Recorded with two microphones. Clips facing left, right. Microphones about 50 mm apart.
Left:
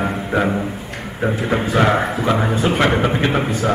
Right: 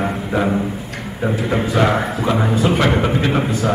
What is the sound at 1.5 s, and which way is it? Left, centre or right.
Music, centre.